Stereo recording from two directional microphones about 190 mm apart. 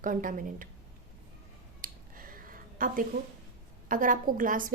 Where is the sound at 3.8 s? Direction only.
45° right (ahead or behind).